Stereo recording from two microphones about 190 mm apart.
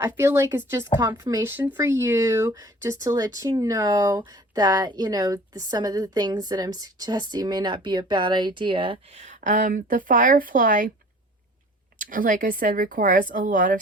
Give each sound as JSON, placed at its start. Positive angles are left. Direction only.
{"t": 0.0, "sound": "a woman's voice", "side_deg": -15}
{"t": 11.9, "sound": "speech", "side_deg": -45}